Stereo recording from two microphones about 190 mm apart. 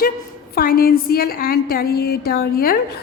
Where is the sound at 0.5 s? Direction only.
50° left (ahead or behind).